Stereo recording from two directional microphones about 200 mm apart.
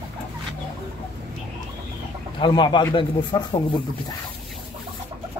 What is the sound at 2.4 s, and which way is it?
Speech, 20° left (ahead or behind).